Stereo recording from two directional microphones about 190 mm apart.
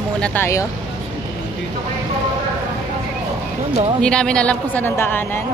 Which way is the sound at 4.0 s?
5° left (ahead or behind).